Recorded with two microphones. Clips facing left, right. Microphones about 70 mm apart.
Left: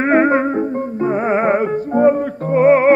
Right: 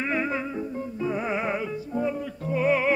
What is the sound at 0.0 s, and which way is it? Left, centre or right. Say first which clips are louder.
Music: left 14 dB; left.